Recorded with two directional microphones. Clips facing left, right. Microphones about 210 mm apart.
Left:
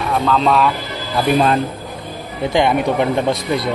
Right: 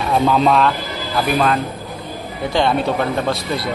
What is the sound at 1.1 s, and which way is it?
Speech, 30° left (ahead or behind).